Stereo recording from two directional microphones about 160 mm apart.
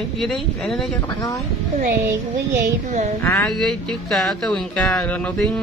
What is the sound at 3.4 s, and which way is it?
Speech, 5° left (ahead or behind).